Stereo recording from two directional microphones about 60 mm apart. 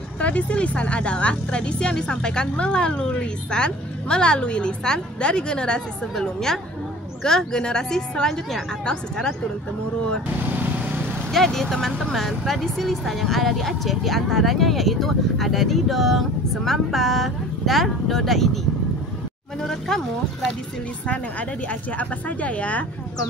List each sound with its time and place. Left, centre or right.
0.2 s speech: left
11.3 s speech: centre
21.1 s speech: left